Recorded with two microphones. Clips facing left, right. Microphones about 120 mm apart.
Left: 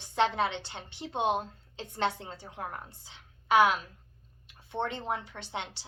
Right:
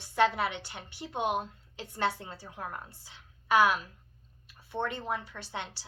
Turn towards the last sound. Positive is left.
turn(degrees=20)  # may be behind; listen again after turning